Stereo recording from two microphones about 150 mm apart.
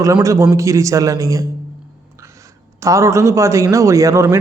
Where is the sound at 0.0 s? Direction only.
20° right (ahead or behind).